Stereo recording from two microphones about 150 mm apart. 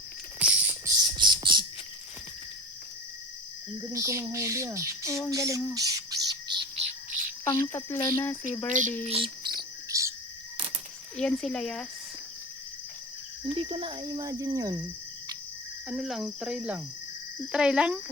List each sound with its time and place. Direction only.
0.4 s a sound: 10° right (ahead or behind)
1.1 s a sound: 30° right (ahead or behind)
3.9 s cricket: 20° right (ahead or behind)
5.3 s speech: 20° right (ahead or behind)
6.2 s bird: 30° right (ahead or behind)
6.7 s bird: 45° right (ahead or behind)
7.4 s speech: 15° left (ahead or behind)
7.9 s speech: 25° left (ahead or behind)
8.2 s speech: 15° left (ahead or behind)
9.0 s cricket: 35° right (ahead or behind)
9.9 s cricket: 20° right (ahead or behind)
11.2 s speech: 5° left (ahead or behind)
13.4 s cricket: 35° right (ahead or behind)
15.9 s speech: centre (ahead or behind)